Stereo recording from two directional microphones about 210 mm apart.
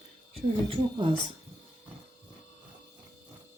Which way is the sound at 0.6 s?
25° right (ahead or behind).